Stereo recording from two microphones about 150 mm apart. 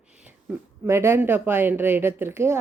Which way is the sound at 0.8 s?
15° right (ahead or behind).